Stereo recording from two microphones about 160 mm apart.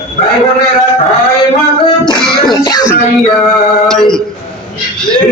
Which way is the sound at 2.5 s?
25° left (ahead or behind).